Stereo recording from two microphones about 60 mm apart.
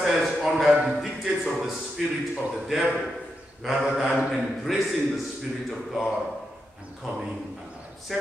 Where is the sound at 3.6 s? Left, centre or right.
Centre.